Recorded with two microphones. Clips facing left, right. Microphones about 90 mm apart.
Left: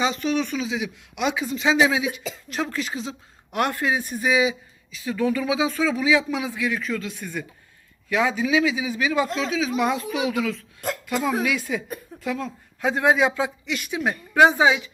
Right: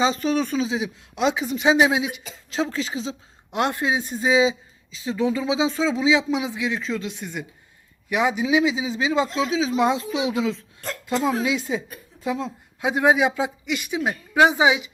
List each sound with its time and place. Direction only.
0.0 s a woman's voice: 35° right (ahead or behind); by 14.8 s 15° right (ahead or behind)